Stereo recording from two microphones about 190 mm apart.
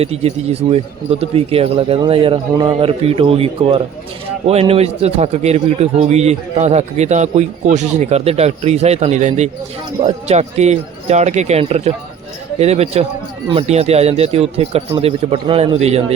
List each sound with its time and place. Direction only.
0.0 s a man's voice: 35° right (ahead or behind)